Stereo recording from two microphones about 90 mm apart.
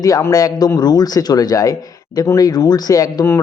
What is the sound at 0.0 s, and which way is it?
Speech, 40° left (ahead or behind).